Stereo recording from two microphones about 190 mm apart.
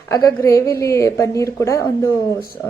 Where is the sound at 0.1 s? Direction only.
15° left (ahead or behind).